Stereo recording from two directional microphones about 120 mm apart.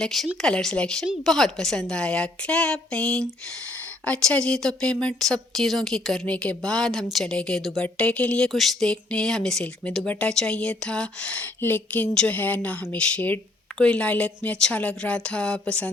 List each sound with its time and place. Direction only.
0.0 s speech: centre (ahead or behind)